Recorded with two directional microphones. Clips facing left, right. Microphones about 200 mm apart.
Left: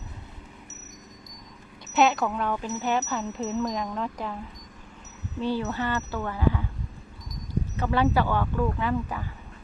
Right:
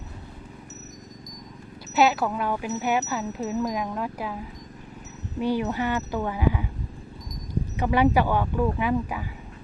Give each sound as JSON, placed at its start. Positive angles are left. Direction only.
{"t": 2.0, "sound": "speech", "side_deg": -5}
{"t": 5.4, "sound": "speech", "side_deg": -15}
{"t": 7.8, "sound": "speech", "side_deg": -15}